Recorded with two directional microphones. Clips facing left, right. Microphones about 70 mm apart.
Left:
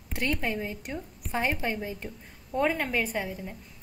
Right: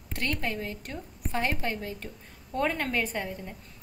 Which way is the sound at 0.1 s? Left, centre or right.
Centre.